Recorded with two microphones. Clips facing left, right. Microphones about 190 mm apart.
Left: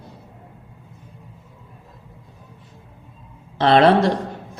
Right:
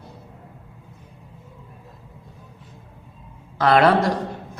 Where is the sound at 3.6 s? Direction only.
25° left (ahead or behind).